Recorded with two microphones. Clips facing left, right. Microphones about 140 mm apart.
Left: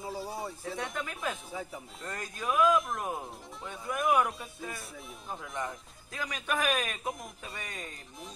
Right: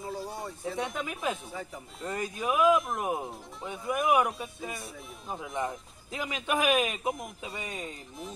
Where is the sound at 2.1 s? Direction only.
25° right (ahead or behind).